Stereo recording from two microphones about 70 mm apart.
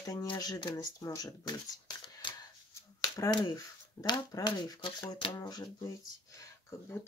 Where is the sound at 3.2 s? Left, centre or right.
Left.